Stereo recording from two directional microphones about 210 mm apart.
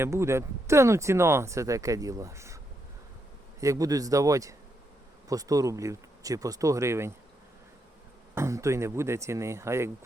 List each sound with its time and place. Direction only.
0.0 s speech: 15° right (ahead or behind)
3.6 s speech: 15° right (ahead or behind)
8.4 s speech: 15° right (ahead or behind)